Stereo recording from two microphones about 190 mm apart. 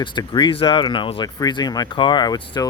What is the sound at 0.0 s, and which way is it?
Speech, 25° left (ahead or behind).